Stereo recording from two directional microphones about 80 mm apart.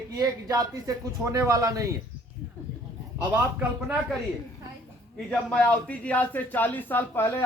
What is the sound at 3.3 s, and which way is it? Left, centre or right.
Speech, centre.